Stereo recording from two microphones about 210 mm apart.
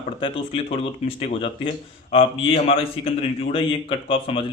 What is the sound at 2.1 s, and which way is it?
Speech, 25° left (ahead or behind).